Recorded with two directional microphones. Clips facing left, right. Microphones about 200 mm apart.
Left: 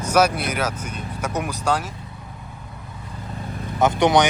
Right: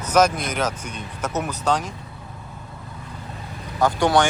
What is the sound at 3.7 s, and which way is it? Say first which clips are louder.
Speech: left 1 dB; 20° left (ahead or behind).